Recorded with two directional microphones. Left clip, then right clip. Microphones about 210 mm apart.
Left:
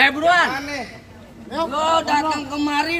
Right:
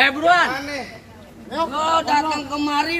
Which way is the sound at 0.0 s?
50° left (ahead or behind).